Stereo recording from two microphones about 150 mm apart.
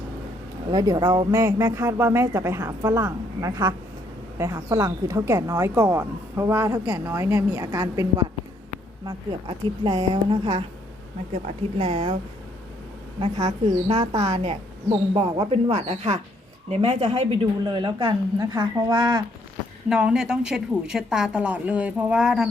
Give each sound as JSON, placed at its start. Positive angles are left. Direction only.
{"t": 0.7, "sound": "speech", "side_deg": -25}
{"t": 1.3, "sound": "speech", "side_deg": -15}
{"t": 9.0, "sound": "a woman's voice", "side_deg": -30}
{"t": 11.8, "sound": "a woman's voice", "side_deg": -35}
{"t": 13.1, "sound": "a woman's voice", "side_deg": -35}
{"t": 14.3, "sound": "speech", "side_deg": -45}
{"t": 15.1, "sound": "a woman's voice", "side_deg": -30}
{"t": 15.7, "sound": "a woman's voice", "side_deg": -45}
{"t": 19.9, "sound": "a woman's voice", "side_deg": -5}